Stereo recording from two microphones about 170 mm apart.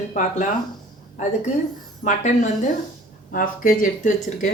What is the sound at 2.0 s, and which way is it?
Speech, 45° left (ahead or behind).